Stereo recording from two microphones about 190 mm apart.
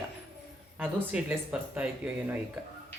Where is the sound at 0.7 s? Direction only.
10° right (ahead or behind).